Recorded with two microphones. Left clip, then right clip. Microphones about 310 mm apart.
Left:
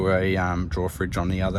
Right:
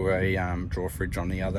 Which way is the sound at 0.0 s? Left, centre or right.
Left.